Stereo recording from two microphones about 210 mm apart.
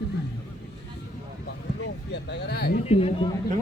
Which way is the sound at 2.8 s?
30° left (ahead or behind).